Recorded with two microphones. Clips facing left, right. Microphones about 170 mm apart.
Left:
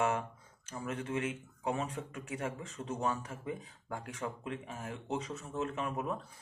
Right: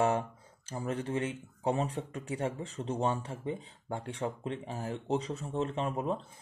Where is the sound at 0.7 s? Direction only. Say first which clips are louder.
Right 4 dB; 35° right (ahead or behind).